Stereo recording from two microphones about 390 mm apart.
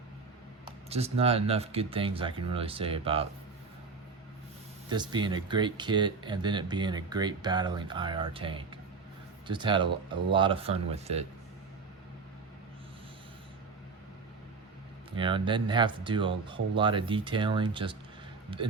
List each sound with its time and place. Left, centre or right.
0.6 s speech: centre
4.9 s speech: centre
15.1 s speech: centre